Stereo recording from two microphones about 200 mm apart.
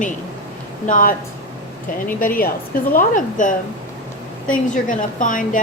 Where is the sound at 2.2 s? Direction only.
45° left (ahead or behind).